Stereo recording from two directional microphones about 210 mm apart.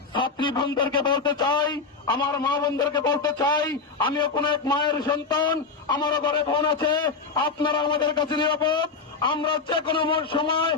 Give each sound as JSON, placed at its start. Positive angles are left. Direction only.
{"t": 0.1, "sound": "a man's voice", "side_deg": 20}